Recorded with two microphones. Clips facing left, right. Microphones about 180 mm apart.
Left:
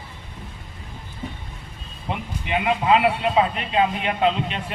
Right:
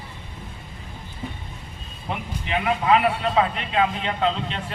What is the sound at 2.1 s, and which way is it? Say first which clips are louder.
A man's voice: left 1 dB; 20° left (ahead or behind).